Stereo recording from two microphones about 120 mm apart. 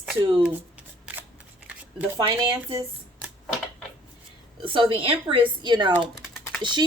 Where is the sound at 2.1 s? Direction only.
40° right (ahead or behind).